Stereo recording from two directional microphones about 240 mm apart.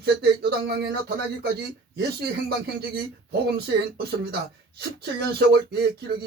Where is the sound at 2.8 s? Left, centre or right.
Right.